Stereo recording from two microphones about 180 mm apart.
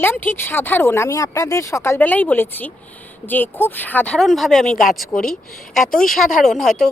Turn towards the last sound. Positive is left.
turn(degrees=0)  # may be behind; listen again after turning